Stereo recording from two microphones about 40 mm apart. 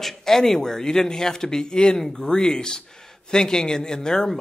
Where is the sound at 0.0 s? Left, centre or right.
Centre.